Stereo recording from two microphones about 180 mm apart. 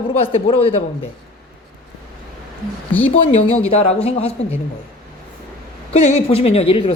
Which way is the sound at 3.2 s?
35° left (ahead or behind).